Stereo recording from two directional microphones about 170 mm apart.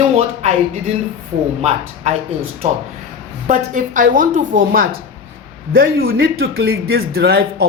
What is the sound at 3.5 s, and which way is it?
A woman's voice, 50° right (ahead or behind).